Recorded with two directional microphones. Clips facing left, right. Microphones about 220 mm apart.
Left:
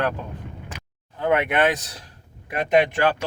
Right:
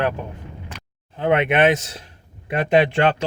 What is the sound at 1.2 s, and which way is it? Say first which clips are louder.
Speech: right 3 dB; 25° right (ahead or behind).